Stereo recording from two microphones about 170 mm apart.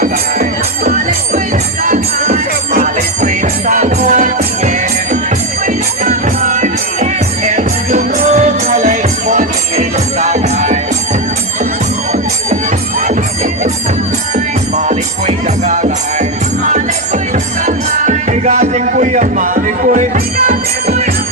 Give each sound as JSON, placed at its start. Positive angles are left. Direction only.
{"t": 1.8, "sound": "music", "side_deg": -55}
{"t": 14.8, "sound": "music", "side_deg": -45}
{"t": 17.7, "sound": "music", "side_deg": -45}